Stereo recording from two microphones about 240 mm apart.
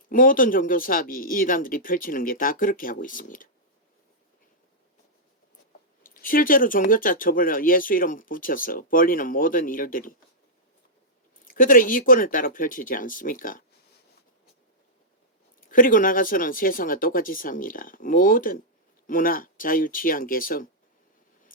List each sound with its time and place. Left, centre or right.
0.1 s speech: left
6.0 s speech: left
11.4 s speech: left
15.7 s speech: left